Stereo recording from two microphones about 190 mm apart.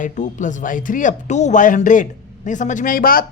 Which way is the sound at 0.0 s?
40° left (ahead or behind).